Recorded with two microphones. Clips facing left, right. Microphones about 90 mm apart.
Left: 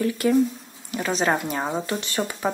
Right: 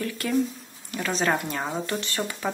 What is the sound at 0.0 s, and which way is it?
Speech, 15° left (ahead or behind).